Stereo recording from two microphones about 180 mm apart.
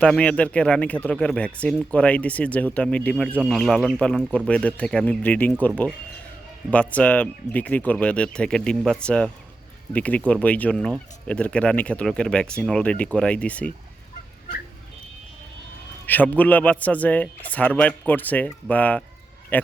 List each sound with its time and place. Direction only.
0.0 s speech: 5° left (ahead or behind)
16.0 s speech: 10° left (ahead or behind)